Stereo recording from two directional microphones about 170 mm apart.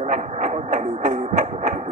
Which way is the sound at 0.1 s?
45° right (ahead or behind).